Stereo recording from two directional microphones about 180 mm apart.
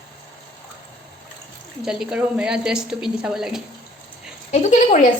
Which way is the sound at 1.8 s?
5° right (ahead or behind).